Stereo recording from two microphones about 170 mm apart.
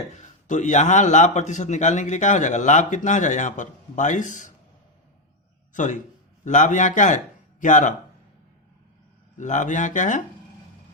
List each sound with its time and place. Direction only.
0.0 s a man's voice: 45° left (ahead or behind)
5.7 s a man's voice: 45° left (ahead or behind)
9.4 s a man's voice: 45° left (ahead or behind)